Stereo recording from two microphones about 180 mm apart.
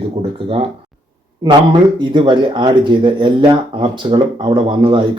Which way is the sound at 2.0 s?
25° right (ahead or behind).